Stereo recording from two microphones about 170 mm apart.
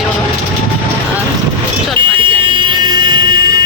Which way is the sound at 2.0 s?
30° right (ahead or behind).